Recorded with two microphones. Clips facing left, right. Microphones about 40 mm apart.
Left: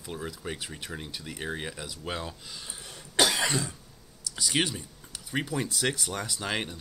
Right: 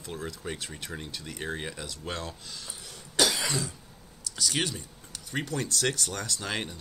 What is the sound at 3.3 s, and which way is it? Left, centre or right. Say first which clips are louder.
Cough: left 3 dB; left.